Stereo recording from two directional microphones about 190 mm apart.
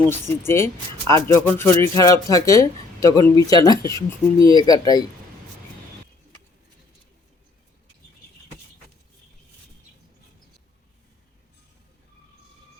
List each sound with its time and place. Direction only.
0.1 s speech: 15° left (ahead or behind)